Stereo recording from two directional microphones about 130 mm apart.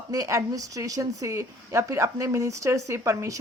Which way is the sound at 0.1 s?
25° right (ahead or behind).